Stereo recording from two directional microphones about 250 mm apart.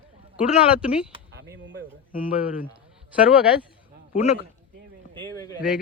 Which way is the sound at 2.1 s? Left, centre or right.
Left.